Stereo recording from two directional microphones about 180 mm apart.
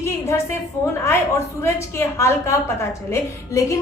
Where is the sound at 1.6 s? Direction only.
15° left (ahead or behind).